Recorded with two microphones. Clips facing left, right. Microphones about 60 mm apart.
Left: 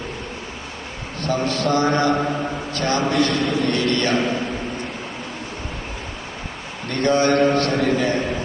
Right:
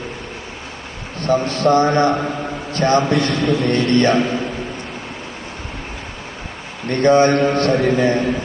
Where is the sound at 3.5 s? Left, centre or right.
Right.